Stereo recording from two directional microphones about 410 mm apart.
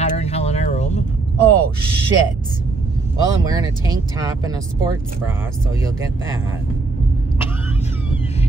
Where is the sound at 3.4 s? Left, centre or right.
Centre.